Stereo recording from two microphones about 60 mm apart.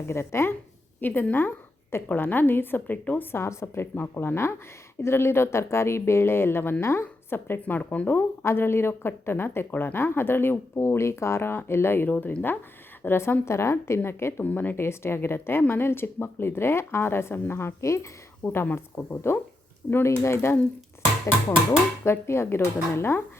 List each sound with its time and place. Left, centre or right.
0.1 s speech: left
1.0 s a woman's voice: left
3.3 s speech: left
3.9 s a woman's voice: left
7.6 s speech: left
8.4 s a woman's voice: left
10.8 s speech: left
12.1 s a woman's voice: left
14.4 s a woman's voice: left
14.8 s a woman's voice: left
18.4 s a woman's voice: left
19.3 s speech: left
21.7 s speech: left